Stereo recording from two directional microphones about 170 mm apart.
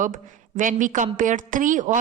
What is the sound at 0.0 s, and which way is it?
A woman's voice, 50° right (ahead or behind).